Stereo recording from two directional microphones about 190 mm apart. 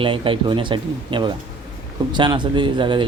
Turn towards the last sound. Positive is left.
turn(degrees=-25)  # may be behind; listen again after turning